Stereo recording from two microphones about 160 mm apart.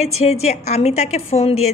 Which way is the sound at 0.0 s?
40° left (ahead or behind).